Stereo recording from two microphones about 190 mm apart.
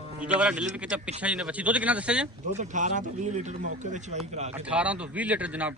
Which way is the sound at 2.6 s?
40° right (ahead or behind).